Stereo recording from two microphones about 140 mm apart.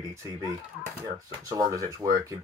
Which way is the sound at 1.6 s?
25° right (ahead or behind).